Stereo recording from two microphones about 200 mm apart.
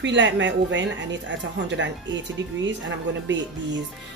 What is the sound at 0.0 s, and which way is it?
A woman's voice, 65° right (ahead or behind).